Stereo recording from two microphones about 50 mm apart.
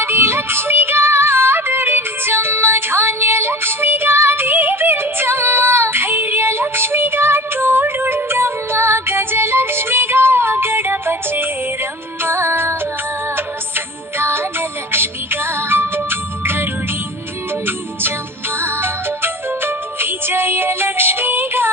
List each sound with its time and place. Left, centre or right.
0.0 s music: right